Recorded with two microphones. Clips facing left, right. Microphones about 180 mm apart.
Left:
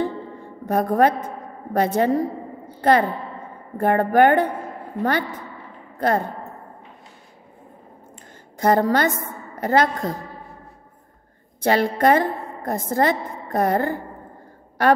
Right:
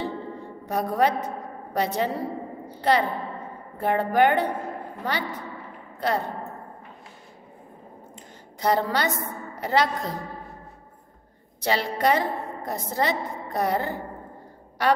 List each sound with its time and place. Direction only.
0.7 s a woman's voice: 50° left (ahead or behind)
8.5 s a woman's voice: 50° left (ahead or behind)
11.6 s a woman's voice: 50° left (ahead or behind)